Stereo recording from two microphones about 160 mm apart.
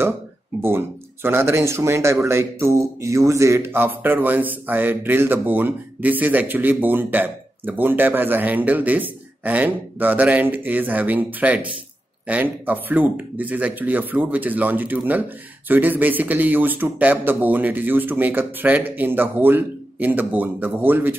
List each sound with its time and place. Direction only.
0.6 s speech: 15° right (ahead or behind)